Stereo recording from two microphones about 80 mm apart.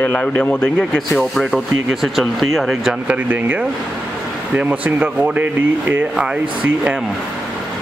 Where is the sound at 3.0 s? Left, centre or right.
Centre.